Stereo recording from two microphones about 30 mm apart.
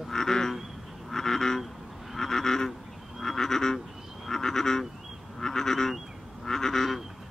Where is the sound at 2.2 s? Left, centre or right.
Centre.